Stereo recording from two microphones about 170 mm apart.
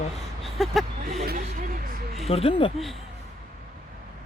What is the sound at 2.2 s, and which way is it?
Speech, 35° left (ahead or behind).